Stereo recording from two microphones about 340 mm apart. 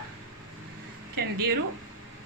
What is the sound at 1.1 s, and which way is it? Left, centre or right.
Speech, right.